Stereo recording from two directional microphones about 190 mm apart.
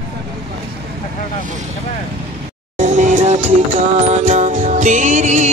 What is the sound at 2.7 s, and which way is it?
Music, 40° right (ahead or behind).